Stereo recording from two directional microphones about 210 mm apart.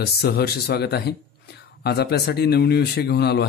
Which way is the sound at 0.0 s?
50° left (ahead or behind).